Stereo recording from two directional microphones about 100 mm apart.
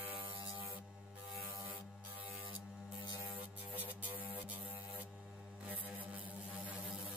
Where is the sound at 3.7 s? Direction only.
20° right (ahead or behind).